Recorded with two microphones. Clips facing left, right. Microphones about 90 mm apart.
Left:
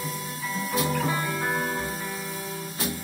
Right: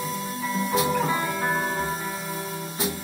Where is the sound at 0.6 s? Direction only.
Centre (ahead or behind).